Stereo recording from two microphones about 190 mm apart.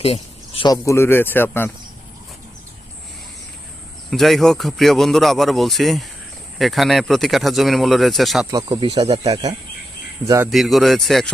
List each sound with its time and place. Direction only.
0.0 s speech: 30° left (ahead or behind); by 1.7 s 10° left (ahead or behind)
4.1 s a man's voice: centre (ahead or behind)
8.4 s speech: 20° right (ahead or behind)
10.5 s a man's voice: centre (ahead or behind)